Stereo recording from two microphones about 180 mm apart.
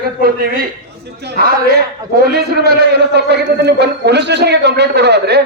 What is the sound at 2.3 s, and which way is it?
A man's voice, 60° right (ahead or behind).